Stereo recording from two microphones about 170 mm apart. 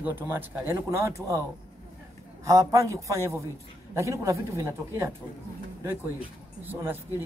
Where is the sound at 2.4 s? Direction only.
20° right (ahead or behind).